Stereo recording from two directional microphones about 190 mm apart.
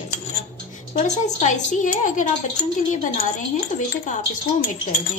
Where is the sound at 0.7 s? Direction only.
35° left (ahead or behind).